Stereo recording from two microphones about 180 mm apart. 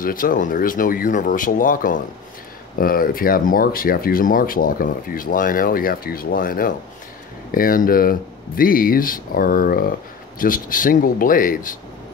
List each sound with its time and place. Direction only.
0.0 s speech: 50° left (ahead or behind)